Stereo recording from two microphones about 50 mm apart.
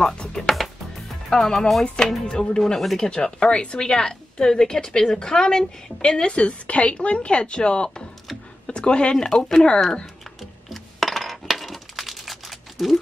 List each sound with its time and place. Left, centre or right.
0.0 s music: centre
0.5 s music: centre
1.3 s a woman's voice: centre
2.2 s a woman's voice: centre
10.7 s coin: centre